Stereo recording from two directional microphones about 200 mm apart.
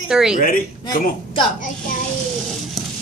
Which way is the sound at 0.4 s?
40° left (ahead or behind).